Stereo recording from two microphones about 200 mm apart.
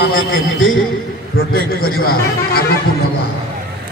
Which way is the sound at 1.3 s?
50° left (ahead or behind).